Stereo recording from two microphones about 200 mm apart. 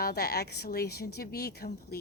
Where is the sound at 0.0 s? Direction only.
50° left (ahead or behind).